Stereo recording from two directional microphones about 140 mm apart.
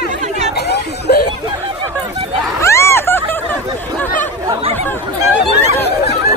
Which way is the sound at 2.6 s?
20° left (ahead or behind).